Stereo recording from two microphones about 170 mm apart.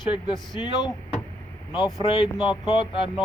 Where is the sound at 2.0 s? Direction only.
25° left (ahead or behind).